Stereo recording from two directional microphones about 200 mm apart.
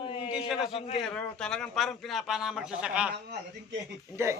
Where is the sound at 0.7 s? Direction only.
30° left (ahead or behind).